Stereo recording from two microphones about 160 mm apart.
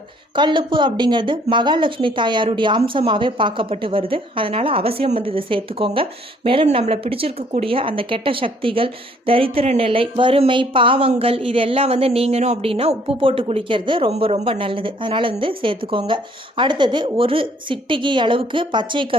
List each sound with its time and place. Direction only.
0.3 s a woman's voice: 30° right (ahead or behind)